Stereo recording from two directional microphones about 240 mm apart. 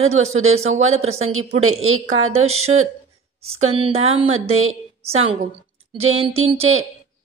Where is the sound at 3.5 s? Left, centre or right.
Right.